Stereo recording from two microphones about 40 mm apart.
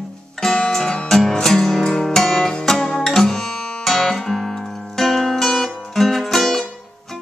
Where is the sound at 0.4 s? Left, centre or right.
Centre.